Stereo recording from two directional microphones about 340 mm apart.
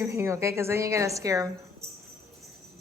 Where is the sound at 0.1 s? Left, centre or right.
Centre.